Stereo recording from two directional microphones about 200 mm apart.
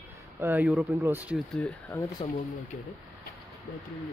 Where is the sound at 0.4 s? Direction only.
10° right (ahead or behind).